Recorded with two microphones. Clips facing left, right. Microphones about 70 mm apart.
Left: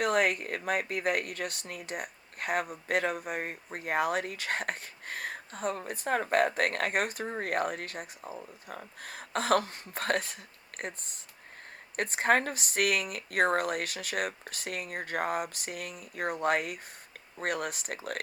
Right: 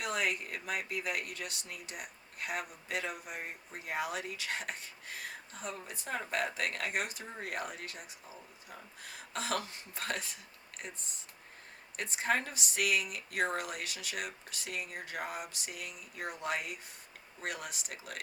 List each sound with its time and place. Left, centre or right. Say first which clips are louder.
0.0 s speech: left 8 dB; left